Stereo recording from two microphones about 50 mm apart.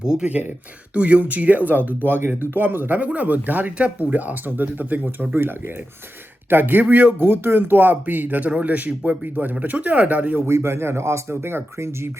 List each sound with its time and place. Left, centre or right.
0.0 s speech: centre
0.3 s speech: right
8.4 s speech: right
10.4 s speech: right